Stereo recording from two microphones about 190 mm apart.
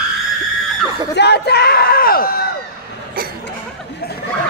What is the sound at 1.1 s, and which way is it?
Speech, 60° left (ahead or behind).